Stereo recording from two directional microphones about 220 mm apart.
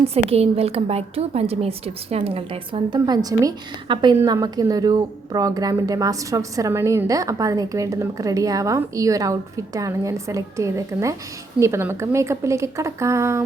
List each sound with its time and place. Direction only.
0.1 s a woman's voice: 25° right (ahead or behind)